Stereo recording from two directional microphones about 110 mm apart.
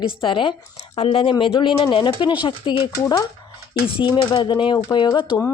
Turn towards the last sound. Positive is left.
turn(degrees=45)  # may be behind; listen again after turning